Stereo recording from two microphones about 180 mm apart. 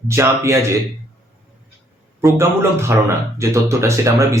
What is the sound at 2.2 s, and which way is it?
A man's voice, 15° right (ahead or behind).